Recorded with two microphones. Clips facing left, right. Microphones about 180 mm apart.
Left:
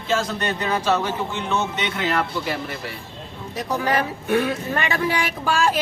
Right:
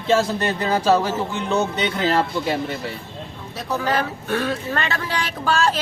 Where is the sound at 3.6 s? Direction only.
15° left (ahead or behind).